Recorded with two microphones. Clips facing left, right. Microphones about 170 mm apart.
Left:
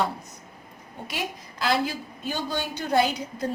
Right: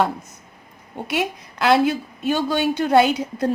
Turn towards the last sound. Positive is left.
turn(degrees=-70)  # may be behind; listen again after turning